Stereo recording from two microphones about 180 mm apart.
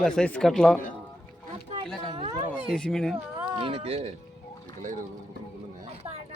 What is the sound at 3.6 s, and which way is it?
Speech, 35° right (ahead or behind).